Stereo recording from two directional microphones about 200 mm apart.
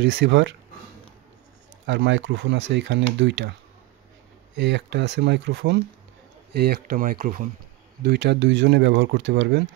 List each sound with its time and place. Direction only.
0.0 s speech: 65° right (ahead or behind)
1.9 s speech: 65° right (ahead or behind)
4.6 s speech: 60° right (ahead or behind); by 7.4 s 45° right (ahead or behind)
8.0 s speech: 55° right (ahead or behind)